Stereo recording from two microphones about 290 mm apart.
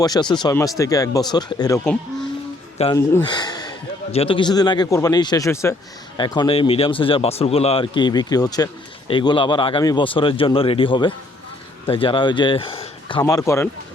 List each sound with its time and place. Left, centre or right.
0.0 s speech: centre
2.7 s speech: centre